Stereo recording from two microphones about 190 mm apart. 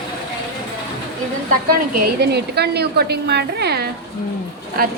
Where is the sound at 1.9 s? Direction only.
55° right (ahead or behind).